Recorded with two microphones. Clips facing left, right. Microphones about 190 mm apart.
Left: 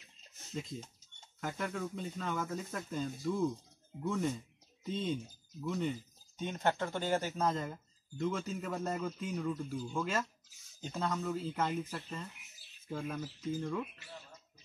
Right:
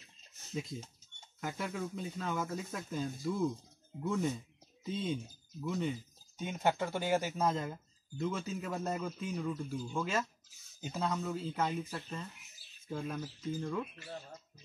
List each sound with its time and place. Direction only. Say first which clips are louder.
1.4 s speech: even; 5° right (ahead or behind)